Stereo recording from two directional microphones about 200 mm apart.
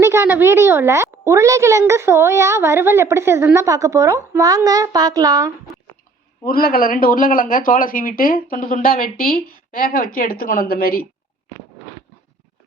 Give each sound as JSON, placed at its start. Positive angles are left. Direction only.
{"t": 0.0, "sound": "a child's voice", "side_deg": -10}
{"t": 6.4, "sound": "speech", "side_deg": 45}